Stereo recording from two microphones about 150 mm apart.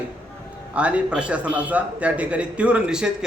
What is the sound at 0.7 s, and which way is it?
A man's voice, 10° right (ahead or behind).